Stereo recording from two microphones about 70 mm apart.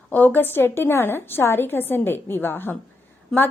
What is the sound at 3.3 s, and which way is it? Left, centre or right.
Speech, centre.